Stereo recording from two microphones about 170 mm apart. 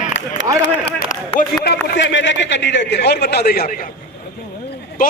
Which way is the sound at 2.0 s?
90° left.